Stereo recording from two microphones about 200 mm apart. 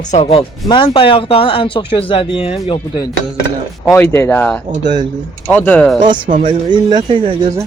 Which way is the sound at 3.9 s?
10° left (ahead or behind).